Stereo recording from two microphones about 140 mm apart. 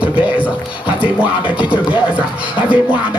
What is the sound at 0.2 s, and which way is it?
Music, 10° right (ahead or behind).